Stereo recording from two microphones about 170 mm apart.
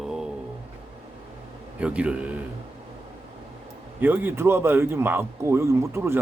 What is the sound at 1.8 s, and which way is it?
Speech, 5° right (ahead or behind).